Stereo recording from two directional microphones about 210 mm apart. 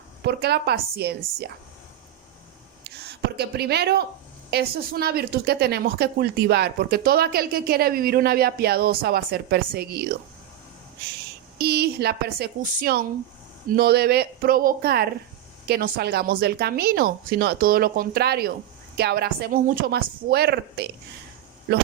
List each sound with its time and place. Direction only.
0.2 s speech: 50° right (ahead or behind)
2.8 s speech: 50° right (ahead or behind)
11.5 s speech: 50° right (ahead or behind)